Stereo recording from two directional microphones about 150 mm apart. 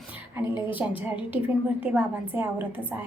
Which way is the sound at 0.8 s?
15° right (ahead or behind).